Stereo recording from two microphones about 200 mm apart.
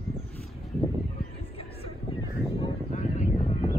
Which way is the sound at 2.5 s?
30° left (ahead or behind).